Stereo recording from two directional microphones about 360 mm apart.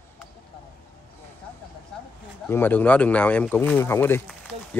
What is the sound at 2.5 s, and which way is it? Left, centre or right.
Speech, centre.